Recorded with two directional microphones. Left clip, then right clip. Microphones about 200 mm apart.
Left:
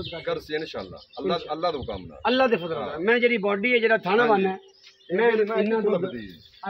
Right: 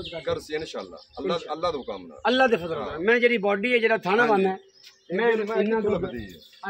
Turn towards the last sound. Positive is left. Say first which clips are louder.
# left 1 dB
turn(degrees=-10)  # may be behind; listen again after turning